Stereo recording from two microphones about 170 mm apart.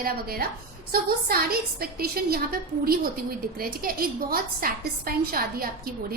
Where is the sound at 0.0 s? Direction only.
65° right (ahead or behind).